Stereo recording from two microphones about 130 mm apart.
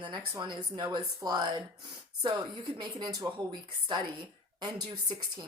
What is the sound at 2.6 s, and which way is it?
Speech, 30° right (ahead or behind).